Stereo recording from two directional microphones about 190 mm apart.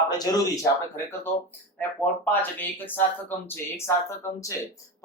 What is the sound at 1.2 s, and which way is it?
Speech, 10° left (ahead or behind).